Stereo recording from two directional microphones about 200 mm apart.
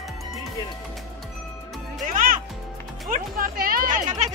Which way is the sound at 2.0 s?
45° right (ahead or behind).